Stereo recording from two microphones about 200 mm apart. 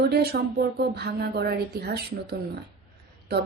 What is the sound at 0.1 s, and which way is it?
Speech, 50° right (ahead or behind).